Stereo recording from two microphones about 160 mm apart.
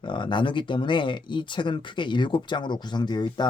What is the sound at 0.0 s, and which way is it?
Speech, 30° left (ahead or behind).